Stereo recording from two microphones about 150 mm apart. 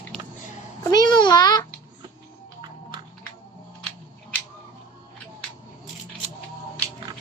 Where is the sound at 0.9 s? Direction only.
30° left (ahead or behind).